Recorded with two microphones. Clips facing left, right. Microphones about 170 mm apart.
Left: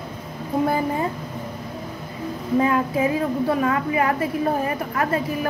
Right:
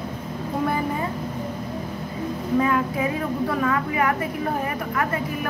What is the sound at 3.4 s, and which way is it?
A woman's voice, 25° left (ahead or behind).